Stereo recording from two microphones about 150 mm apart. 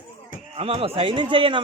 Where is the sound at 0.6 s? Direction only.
40° right (ahead or behind).